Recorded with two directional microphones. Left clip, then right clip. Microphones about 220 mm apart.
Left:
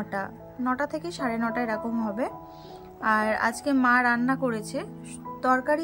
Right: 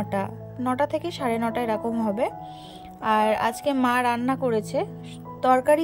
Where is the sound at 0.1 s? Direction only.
40° right (ahead or behind).